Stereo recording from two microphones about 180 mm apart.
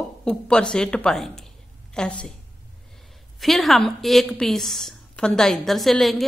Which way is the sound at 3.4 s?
Centre (ahead or behind).